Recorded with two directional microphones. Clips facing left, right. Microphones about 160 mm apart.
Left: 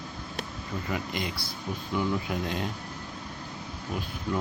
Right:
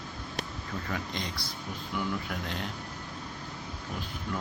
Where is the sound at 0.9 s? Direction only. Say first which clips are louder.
Left 4 dB; 5° left (ahead or behind).